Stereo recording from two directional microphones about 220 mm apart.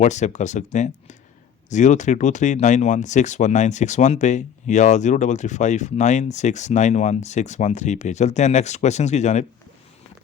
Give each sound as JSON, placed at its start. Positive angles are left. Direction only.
{"t": 0.0, "sound": "speech", "side_deg": 30}